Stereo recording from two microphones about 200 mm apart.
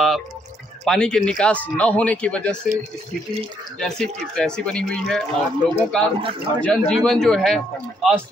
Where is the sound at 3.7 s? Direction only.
5° left (ahead or behind).